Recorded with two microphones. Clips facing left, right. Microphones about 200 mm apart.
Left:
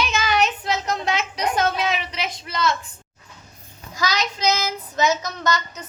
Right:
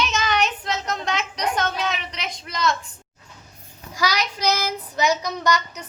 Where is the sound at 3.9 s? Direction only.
10° right (ahead or behind).